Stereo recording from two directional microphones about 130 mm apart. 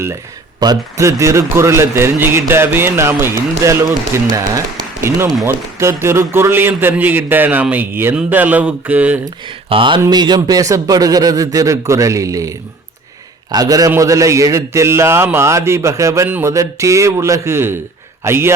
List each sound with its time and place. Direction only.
0.6 s a man's voice: 25° right (ahead or behind); by 9.1 s 10° right (ahead or behind)
9.6 s a sound: 40° right (ahead or behind)
10.1 s a man's voice: 30° right (ahead or behind)